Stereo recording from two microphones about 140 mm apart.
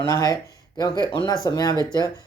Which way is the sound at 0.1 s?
25° left (ahead or behind).